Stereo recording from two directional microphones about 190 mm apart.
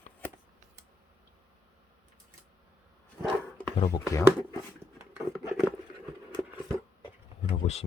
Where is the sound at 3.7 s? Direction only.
30° left (ahead or behind).